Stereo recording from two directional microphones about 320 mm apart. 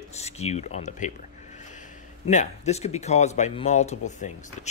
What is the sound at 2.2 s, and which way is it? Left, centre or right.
Speech, left.